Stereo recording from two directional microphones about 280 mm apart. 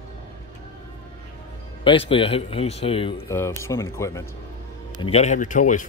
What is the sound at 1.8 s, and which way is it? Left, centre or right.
Speech, centre.